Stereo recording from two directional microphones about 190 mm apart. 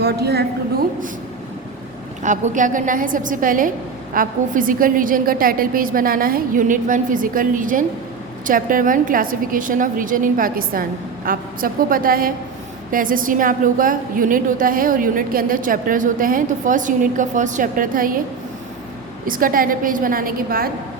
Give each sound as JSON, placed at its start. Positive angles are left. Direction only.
{"t": 0.0, "sound": "a woman's voice", "side_deg": -55}
{"t": 2.2, "sound": "a woman's voice", "side_deg": -40}
{"t": 19.2, "sound": "a woman's voice", "side_deg": -45}